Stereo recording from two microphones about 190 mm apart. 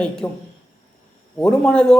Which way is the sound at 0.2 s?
5° left (ahead or behind).